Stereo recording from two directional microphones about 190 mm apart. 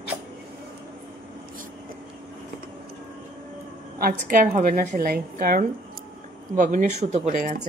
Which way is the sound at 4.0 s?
50° right (ahead or behind).